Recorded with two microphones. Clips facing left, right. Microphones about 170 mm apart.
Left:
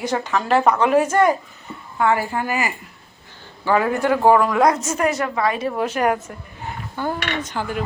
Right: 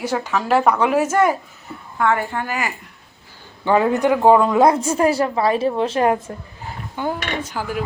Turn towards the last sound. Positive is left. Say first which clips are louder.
# even
turn(degrees=-5)  # may be behind; listen again after turning